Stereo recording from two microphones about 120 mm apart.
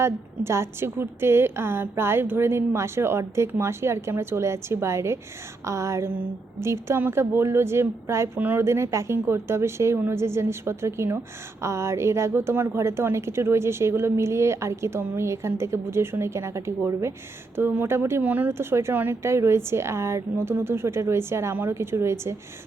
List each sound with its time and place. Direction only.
0.0 s a woman's voice: 20° right (ahead or behind)